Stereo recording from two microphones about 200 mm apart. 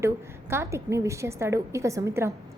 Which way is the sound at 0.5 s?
15° right (ahead or behind).